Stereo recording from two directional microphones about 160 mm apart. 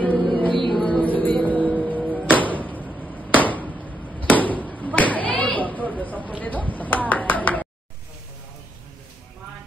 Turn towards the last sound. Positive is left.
turn(degrees=10)  # may be behind; listen again after turning